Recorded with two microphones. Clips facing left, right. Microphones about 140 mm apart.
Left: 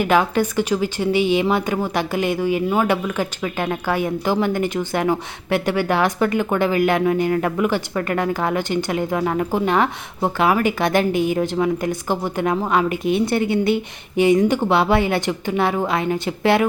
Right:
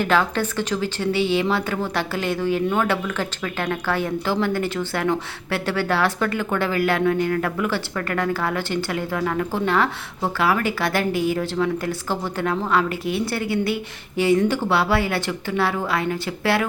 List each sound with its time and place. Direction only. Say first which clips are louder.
0.0 s a woman's voice: left 3 dB; 15° left (ahead or behind)